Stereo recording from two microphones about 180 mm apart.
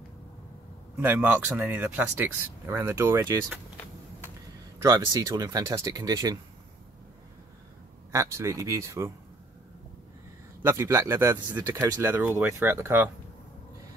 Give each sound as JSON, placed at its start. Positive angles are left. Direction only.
{"t": 1.0, "sound": "speech", "side_deg": -10}
{"t": 3.4, "sound": "vehicle", "side_deg": 10}
{"t": 4.8, "sound": "speech", "side_deg": -20}
{"t": 8.1, "sound": "speech", "side_deg": -15}
{"t": 10.6, "sound": "speech", "side_deg": -15}